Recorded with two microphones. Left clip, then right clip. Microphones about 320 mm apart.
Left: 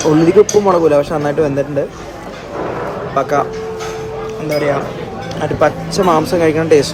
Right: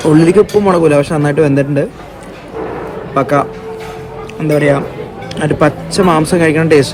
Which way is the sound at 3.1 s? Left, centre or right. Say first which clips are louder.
Right 3 dB; right.